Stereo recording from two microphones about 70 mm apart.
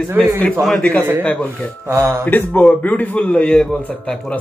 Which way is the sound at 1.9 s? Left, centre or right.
Right.